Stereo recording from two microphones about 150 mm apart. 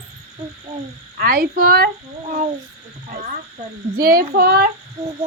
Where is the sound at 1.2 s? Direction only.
90° right.